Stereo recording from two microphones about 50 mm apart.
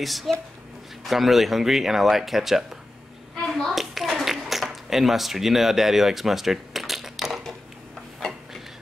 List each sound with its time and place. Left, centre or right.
0.0 s speech: centre
3.5 s clapping: centre